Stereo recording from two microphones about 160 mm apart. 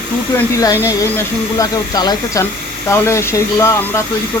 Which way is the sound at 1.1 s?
20° left (ahead or behind).